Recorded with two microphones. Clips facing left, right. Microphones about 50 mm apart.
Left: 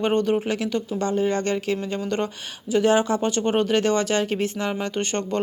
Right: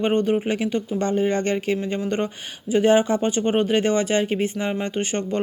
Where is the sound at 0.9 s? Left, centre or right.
Right; by 5.4 s centre.